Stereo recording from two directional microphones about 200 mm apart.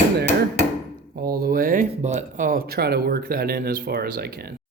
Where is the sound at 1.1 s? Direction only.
50° right (ahead or behind).